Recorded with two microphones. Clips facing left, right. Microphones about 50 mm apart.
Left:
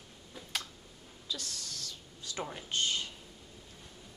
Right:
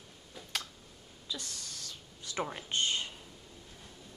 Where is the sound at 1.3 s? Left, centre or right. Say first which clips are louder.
Left 1 dB; centre.